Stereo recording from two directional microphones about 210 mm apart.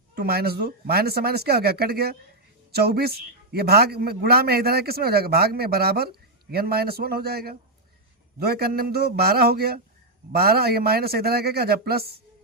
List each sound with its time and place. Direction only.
0.2 s a man's voice: 50° right (ahead or behind)